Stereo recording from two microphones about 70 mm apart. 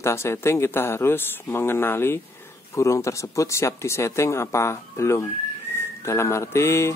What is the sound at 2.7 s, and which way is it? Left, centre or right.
Speech, left.